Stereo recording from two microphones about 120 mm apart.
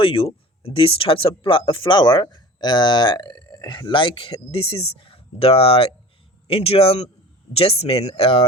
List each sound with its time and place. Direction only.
0.0 s speech: 50° left (ahead or behind)